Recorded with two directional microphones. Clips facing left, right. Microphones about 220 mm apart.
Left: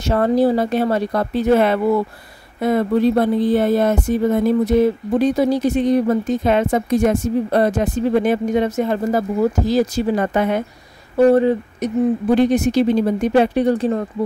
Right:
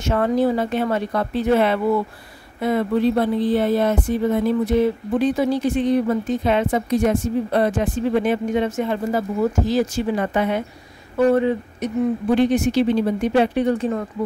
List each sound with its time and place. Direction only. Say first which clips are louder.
0.0 s speech: left 3 dB; 35° left (ahead or behind)